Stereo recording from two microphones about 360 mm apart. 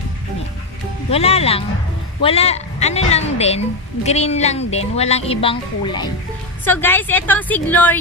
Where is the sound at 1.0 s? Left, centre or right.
Centre.